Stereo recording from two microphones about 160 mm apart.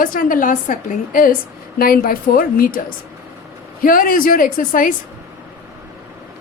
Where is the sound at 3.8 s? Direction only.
60° left (ahead or behind).